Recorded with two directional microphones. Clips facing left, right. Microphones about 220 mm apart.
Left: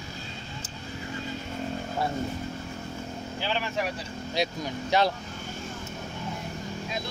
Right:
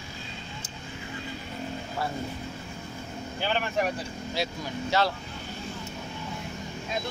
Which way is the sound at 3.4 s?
55° right (ahead or behind).